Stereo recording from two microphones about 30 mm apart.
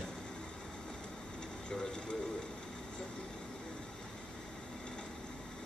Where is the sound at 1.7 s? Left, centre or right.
Left.